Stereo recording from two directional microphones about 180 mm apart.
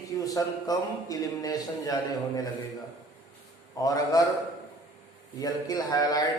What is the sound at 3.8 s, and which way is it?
Speech, 20° left (ahead or behind).